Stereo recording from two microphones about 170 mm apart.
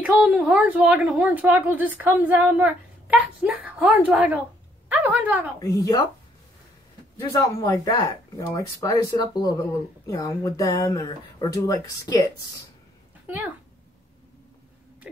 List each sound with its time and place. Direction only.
0.0 s a woman's voice: centre (ahead or behind)
5.6 s speech: 20° left (ahead or behind)
7.2 s speech: 20° left (ahead or behind)